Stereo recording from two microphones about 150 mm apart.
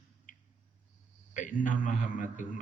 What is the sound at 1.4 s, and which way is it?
A man's voice, 60° left (ahead or behind).